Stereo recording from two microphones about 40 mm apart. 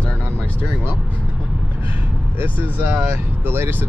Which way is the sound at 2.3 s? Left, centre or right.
Right.